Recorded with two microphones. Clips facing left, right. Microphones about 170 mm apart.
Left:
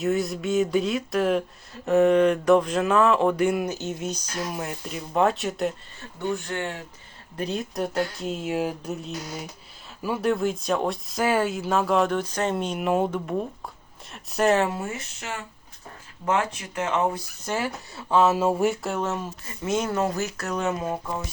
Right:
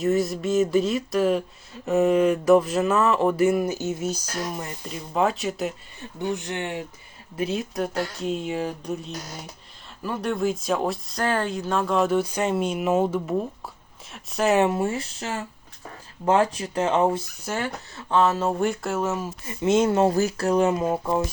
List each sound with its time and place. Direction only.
0.0 s speech: centre (ahead or behind)
6.0 s speech: 20° right (ahead or behind)
7.3 s speech: 5° right (ahead or behind)
14.8 s speech: 30° right (ahead or behind)
17.4 s speech: 5° left (ahead or behind)
19.5 s speech: 25° right (ahead or behind)